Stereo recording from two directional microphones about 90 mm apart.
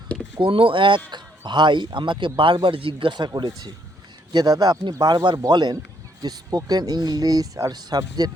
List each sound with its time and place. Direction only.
0.3 s a man's voice: 75° right (ahead or behind); by 8.3 s 50° right (ahead or behind)